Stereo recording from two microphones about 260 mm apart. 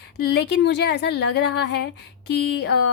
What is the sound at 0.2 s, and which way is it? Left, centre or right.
Speech, left.